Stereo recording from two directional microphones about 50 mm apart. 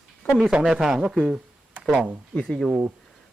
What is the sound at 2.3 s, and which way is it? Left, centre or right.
Speech, centre.